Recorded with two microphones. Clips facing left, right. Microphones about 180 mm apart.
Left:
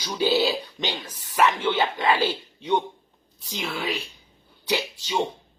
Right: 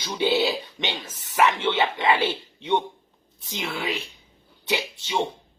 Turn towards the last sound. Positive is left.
turn(degrees=-25)  # may be behind; listen again after turning